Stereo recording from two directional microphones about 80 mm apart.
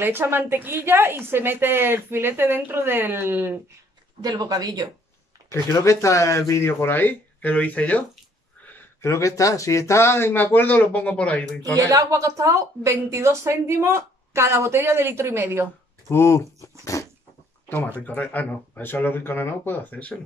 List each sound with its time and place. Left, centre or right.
0.0 s a woman's voice: right
4.2 s speech: right
5.5 s speech: left
6.8 s speech: left
9.0 s speech: left; by 11.4 s centre
11.7 s a woman's voice: right
16.1 s speech: left
16.9 s dog: left
17.6 s speech: left